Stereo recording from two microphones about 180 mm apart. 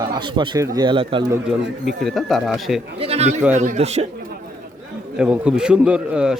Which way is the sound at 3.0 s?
35° right (ahead or behind).